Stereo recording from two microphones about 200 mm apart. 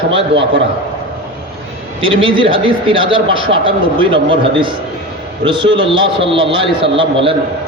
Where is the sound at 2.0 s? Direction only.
25° right (ahead or behind).